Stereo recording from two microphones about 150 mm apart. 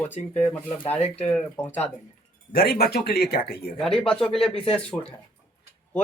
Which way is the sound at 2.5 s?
85° left.